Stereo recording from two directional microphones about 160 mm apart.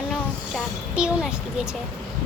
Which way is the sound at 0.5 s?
5° right (ahead or behind).